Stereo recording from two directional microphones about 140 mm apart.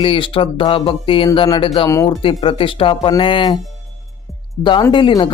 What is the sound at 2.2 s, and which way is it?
Speech, 40° left (ahead or behind).